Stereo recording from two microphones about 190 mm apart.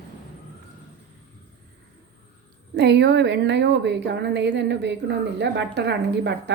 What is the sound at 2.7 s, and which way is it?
A woman's voice, 65° right (ahead or behind).